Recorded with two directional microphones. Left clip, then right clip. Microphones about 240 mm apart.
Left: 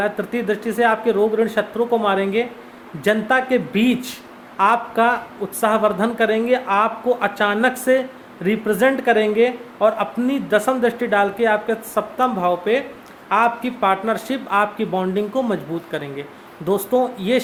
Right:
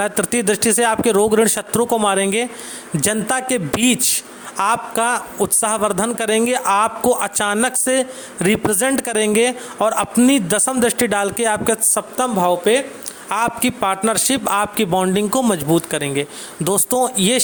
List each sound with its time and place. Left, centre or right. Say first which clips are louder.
0.0 s a man's voice: right 3 dB; right
13.2 s a man's voice: left 2 dB; right